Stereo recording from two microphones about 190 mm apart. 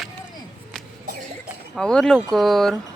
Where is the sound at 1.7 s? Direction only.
5° left (ahead or behind).